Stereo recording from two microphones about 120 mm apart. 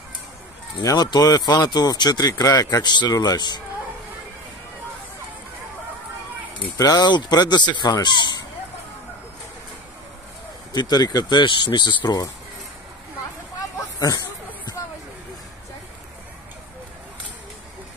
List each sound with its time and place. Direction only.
0.8 s speech: 35° left (ahead or behind)
6.8 s speech: 30° left (ahead or behind)
10.7 s speech: 35° left (ahead or behind)
13.9 s speech: 35° left (ahead or behind)